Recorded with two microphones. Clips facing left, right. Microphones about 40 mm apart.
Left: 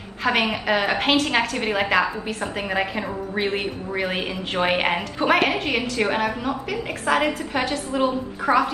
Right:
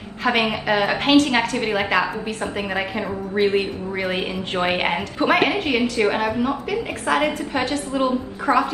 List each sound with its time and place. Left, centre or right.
0.2 s a woman's voice: centre